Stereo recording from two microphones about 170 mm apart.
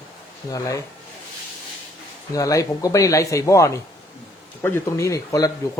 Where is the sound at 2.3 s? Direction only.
20° left (ahead or behind).